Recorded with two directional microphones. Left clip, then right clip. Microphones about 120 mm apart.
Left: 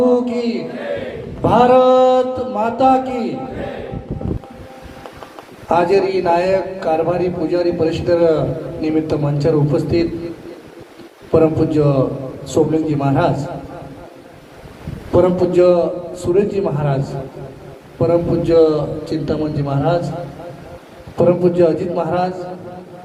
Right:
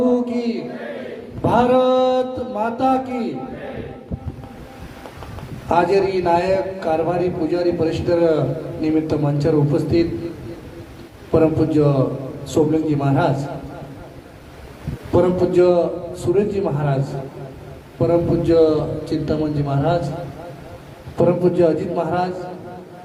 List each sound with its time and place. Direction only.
0.0 s a sound: 30° right (ahead or behind)
1.4 s mantra: 30° right (ahead or behind)
5.6 s a man's voice: 30° right (ahead or behind)
11.3 s a man's voice: 30° right (ahead or behind)
15.1 s a man's voice: 30° right (ahead or behind)
21.2 s a man's voice: 30° right (ahead or behind)